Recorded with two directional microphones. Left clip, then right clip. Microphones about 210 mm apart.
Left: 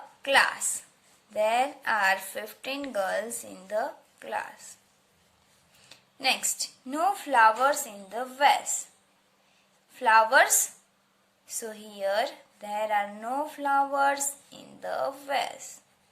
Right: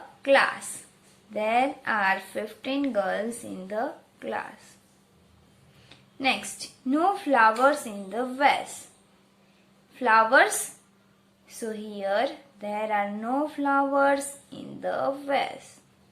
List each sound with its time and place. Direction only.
0.2 s a woman's voice: 30° left (ahead or behind)
5.9 s a woman's voice: 30° left (ahead or behind)
9.9 s a woman's voice: 30° left (ahead or behind)
11.6 s a woman's voice: 30° left (ahead or behind)